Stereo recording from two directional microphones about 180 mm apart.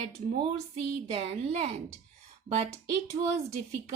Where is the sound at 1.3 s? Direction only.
35° right (ahead or behind).